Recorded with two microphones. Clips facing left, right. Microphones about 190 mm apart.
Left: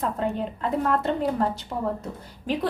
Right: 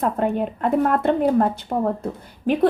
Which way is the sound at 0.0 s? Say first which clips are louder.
Right 5 dB; 55° right (ahead or behind).